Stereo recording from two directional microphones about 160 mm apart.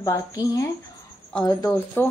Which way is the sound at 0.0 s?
20° left (ahead or behind).